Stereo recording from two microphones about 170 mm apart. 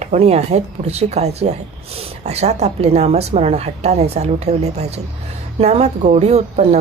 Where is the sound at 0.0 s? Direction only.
40° right (ahead or behind).